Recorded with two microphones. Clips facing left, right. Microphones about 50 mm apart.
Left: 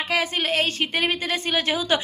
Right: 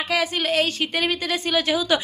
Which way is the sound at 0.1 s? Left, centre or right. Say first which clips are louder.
Right 1 dB; left.